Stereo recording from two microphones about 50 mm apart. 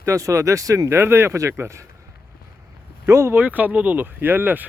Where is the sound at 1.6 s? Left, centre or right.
Right.